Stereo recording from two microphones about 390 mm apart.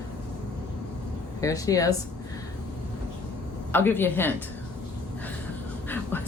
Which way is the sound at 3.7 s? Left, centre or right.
Centre.